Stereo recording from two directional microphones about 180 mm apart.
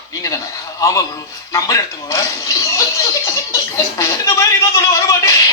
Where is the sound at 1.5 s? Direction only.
15° left (ahead or behind).